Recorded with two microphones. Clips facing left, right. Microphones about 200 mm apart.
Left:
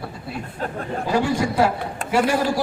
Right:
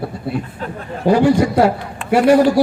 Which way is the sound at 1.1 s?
55° right (ahead or behind).